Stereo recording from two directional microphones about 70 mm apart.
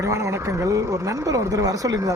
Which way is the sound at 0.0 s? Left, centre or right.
Right.